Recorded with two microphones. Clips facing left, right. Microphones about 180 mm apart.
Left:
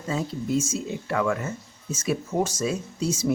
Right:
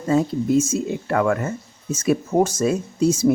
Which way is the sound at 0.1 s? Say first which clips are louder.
Right 8 dB; 55° right (ahead or behind).